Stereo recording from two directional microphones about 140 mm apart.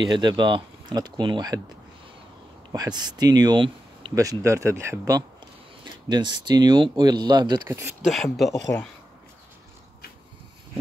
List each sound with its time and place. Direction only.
0.0 s speech: 35° right (ahead or behind)
2.7 s speech: 30° right (ahead or behind)
4.1 s speech: 25° right (ahead or behind)
8.0 s speech: centre (ahead or behind)